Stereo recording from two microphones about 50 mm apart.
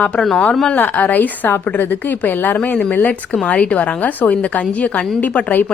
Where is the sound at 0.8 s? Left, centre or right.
Left.